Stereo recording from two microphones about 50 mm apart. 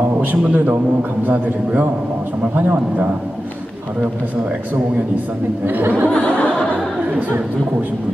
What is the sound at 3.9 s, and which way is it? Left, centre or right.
Speech, right.